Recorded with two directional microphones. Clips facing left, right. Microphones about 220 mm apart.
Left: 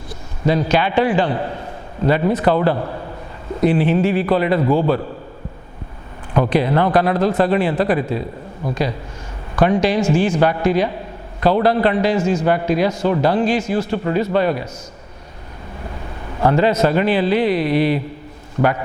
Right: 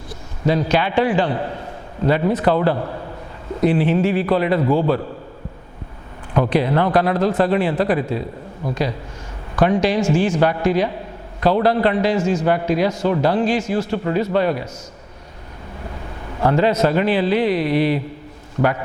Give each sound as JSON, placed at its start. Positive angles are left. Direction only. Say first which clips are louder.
{"t": 0.4, "sound": "speech", "louder": "left 1 dB", "side_deg": 15}
{"t": 3.6, "sound": "speech", "louder": "left 1 dB", "side_deg": 10}
{"t": 6.3, "sound": "speech", "louder": "left 1 dB", "side_deg": 15}
{"t": 16.4, "sound": "speech", "louder": "left 1 dB", "side_deg": 15}